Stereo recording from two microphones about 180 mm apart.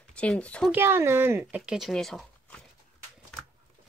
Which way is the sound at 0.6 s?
10° right (ahead or behind).